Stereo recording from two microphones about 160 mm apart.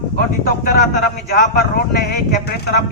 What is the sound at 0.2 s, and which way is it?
Speech, 65° left (ahead or behind).